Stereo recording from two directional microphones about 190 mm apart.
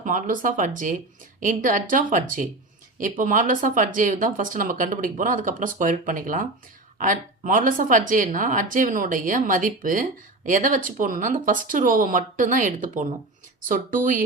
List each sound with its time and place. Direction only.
0.0 s a woman's voice: 45° right (ahead or behind)